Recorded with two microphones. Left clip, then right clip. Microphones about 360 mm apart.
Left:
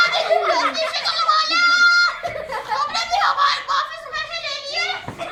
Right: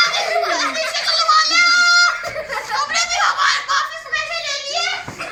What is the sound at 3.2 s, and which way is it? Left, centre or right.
Belly laugh, centre.